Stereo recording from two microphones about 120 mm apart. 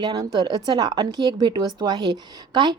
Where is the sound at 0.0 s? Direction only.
35° right (ahead or behind).